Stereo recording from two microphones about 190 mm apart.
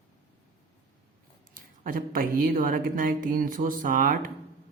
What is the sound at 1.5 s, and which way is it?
Speech, 45° right (ahead or behind).